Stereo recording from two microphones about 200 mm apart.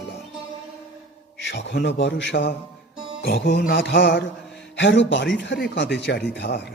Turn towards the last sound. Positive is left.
turn(degrees=55)  # may be behind; listen again after turning